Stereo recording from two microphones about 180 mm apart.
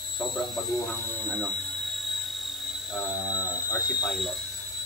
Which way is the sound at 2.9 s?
10° right (ahead or behind).